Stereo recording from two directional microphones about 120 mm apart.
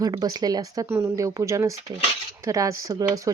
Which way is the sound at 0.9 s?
20° right (ahead or behind).